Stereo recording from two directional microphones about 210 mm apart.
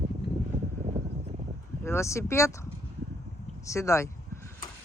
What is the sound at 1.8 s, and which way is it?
Speech, 10° left (ahead or behind).